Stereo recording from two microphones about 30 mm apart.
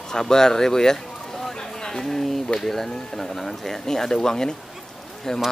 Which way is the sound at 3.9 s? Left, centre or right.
Centre.